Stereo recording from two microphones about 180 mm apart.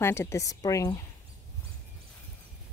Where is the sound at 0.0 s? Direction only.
15° left (ahead or behind).